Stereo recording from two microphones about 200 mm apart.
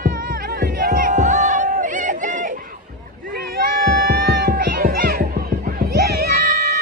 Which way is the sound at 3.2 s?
50° right (ahead or behind).